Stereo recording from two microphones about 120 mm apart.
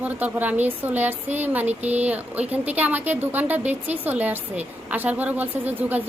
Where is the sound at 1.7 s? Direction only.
65° right (ahead or behind).